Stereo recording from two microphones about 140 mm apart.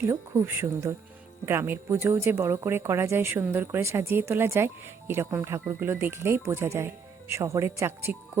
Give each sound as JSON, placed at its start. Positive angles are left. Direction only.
{"t": 0.0, "sound": "speech", "side_deg": -15}